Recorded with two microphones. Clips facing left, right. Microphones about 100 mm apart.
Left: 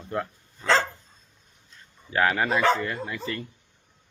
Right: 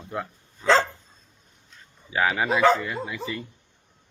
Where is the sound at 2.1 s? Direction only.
5° right (ahead or behind).